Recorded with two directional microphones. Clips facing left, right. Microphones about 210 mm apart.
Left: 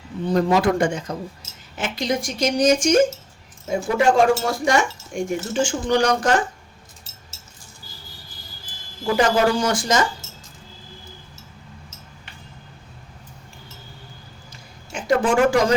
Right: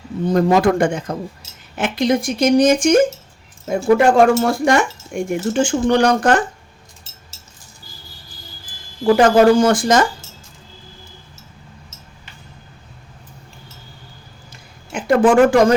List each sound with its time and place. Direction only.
0.3 s speech: 45° right (ahead or behind)
9.1 s speech: 50° right (ahead or behind)
14.5 s a sound: 55° right (ahead or behind)